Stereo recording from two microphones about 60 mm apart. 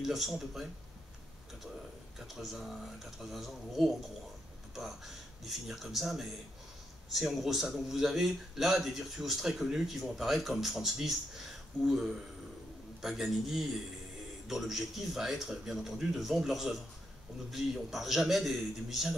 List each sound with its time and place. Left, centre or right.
0.0 s speech: centre
2.1 s speech: centre